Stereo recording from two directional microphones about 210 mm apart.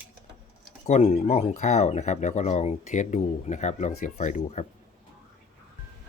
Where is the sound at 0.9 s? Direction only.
30° left (ahead or behind).